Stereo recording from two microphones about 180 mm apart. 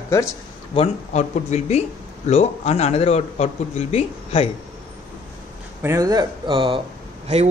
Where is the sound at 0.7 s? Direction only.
40° left (ahead or behind).